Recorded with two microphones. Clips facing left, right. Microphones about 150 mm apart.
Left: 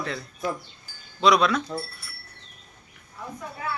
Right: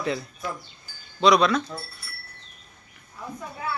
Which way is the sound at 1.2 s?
Centre (ahead or behind).